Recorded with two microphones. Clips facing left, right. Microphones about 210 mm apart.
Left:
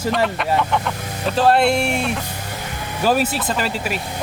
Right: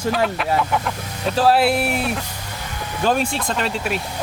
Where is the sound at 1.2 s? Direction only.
Centre (ahead or behind).